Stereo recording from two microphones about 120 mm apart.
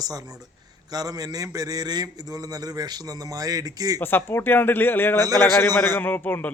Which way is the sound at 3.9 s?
20° left (ahead or behind).